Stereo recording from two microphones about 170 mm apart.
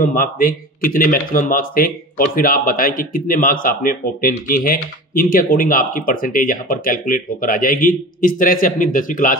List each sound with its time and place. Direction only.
0.0 s speech: 55° left (ahead or behind)